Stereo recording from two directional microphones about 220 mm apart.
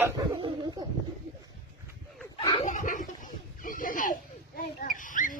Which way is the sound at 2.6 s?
35° left (ahead or behind).